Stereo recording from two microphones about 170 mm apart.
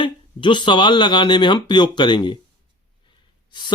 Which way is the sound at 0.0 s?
30° left (ahead or behind).